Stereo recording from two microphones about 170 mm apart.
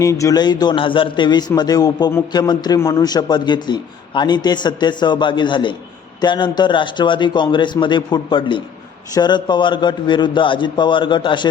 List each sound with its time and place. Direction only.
0.0 s a man's voice: 20° left (ahead or behind)